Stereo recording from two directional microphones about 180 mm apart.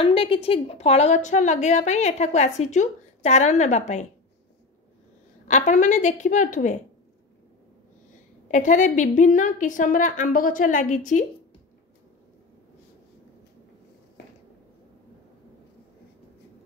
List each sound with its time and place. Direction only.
0.0 s a woman's voice: 30° left (ahead or behind)
5.5 s a woman's voice: 40° left (ahead or behind)
8.5 s a woman's voice: 45° left (ahead or behind)